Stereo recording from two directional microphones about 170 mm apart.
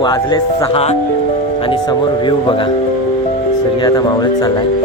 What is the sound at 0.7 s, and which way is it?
Speech, 40° left (ahead or behind).